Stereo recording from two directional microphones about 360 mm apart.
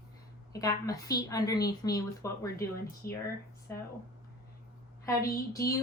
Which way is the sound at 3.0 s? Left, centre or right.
Left.